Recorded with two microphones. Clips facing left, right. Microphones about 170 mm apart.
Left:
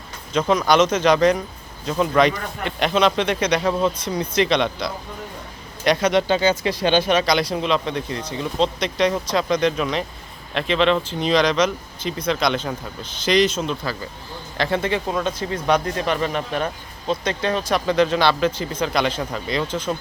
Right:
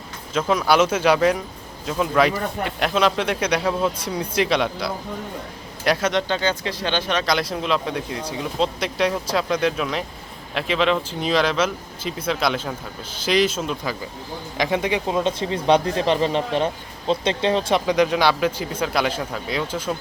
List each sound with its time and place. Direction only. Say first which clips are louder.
0.3 s speech: left 1 dB; 5° right (ahead or behind)
6.1 s speech: left 4 dB; 10° left (ahead or behind)
7.3 s speech: left 2 dB; centre (ahead or behind); by 17.8 s 25° right (ahead or behind)
17.8 s speech: left 3 dB; 10° right (ahead or behind)